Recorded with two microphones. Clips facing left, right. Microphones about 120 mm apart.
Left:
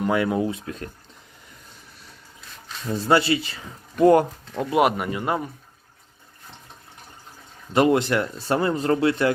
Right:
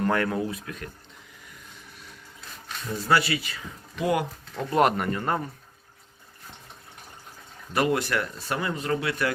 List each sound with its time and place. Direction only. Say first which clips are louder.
0.0 s speech: left 3 dB; 10° left (ahead or behind); by 0.9 s 30° left (ahead or behind)
2.9 s speech: left 4 dB; 25° left (ahead or behind)
3.9 s speech: left 10 dB; 45° left (ahead or behind)
4.5 s speech: left 4 dB; 15° left (ahead or behind)
4.8 s speech: left 1 dB; 5° left (ahead or behind)
7.7 s speech: left 6 dB; 25° left (ahead or behind)